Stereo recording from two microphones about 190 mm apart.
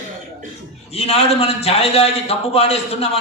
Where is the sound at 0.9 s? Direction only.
30° left (ahead or behind).